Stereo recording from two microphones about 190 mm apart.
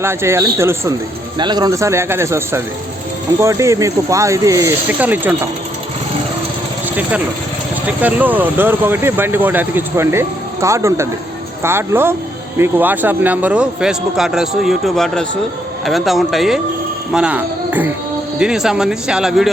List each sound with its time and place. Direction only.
0.0 s speech: 15° right (ahead or behind)
7.9 s speech: 10° right (ahead or behind)